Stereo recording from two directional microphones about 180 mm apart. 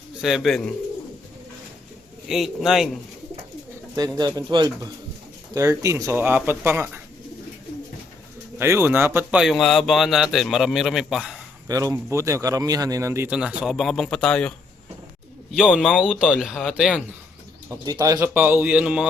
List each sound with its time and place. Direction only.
0.2 s speech: centre (ahead or behind)
2.3 s speech: centre (ahead or behind)
3.9 s speech: 20° right (ahead or behind)
8.5 s speech: 15° right (ahead or behind)
11.7 s speech: 20° right (ahead or behind); by 14.5 s 5° left (ahead or behind)
15.5 s speech: 5° right (ahead or behind)
17.7 s speech: 15° right (ahead or behind)